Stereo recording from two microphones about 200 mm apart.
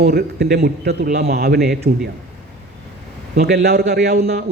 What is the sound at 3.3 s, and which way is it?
Speech, 50° right (ahead or behind).